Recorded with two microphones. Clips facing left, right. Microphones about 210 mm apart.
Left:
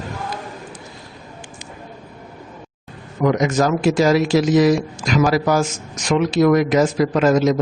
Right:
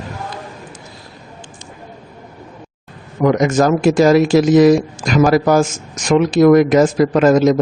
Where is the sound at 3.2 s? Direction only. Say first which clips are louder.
Right 4 dB; 50° right (ahead or behind).